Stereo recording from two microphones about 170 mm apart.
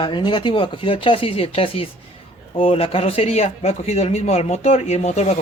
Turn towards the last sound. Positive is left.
turn(degrees=40)  # may be behind; listen again after turning